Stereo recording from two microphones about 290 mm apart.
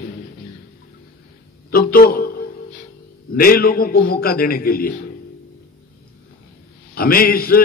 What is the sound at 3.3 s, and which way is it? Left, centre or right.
A man's voice, left.